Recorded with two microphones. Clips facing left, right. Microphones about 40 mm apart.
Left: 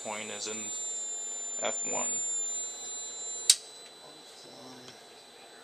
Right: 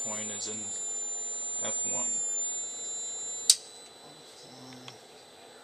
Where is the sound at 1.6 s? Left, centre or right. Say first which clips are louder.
Left 5 dB; left.